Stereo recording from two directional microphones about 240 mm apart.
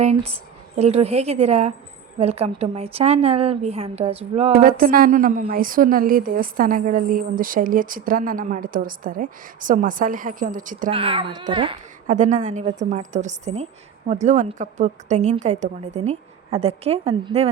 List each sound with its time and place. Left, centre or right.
0.0 s a woman's voice: right
10.9 s a woman's voice: right